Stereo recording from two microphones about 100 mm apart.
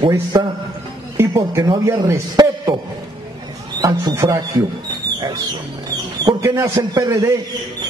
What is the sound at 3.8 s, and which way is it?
Speech, 35° right (ahead or behind).